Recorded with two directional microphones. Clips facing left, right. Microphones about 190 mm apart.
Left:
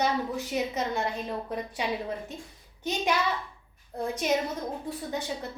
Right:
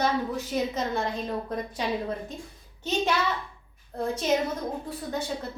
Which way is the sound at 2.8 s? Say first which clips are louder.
Right 2 dB; 15° left (ahead or behind).